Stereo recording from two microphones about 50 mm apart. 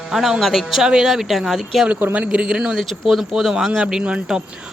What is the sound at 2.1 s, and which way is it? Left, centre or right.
Speech, right.